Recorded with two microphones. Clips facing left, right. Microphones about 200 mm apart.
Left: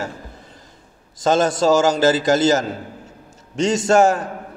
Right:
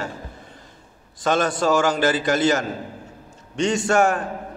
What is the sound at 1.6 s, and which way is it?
Speech, 25° left (ahead or behind).